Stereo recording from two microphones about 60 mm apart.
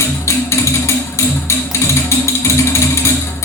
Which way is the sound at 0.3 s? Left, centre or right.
Left.